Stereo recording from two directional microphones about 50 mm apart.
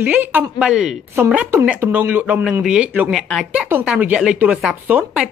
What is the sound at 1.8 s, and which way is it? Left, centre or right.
Speech, right.